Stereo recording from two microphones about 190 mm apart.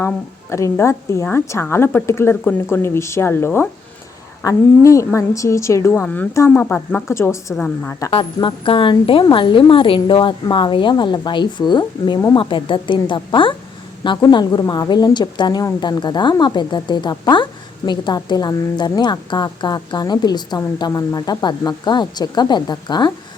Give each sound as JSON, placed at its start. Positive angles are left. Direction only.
{"t": 0.5, "sound": "a woman's voice", "side_deg": 15}
{"t": 8.1, "sound": "a woman's voice", "side_deg": 25}